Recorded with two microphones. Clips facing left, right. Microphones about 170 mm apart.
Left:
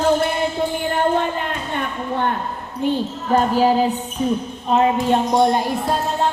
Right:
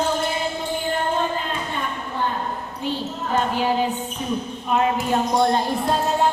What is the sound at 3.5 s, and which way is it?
Music, 40° left (ahead or behind).